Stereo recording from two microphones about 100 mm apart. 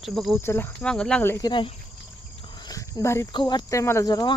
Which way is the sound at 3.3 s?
50° left (ahead or behind).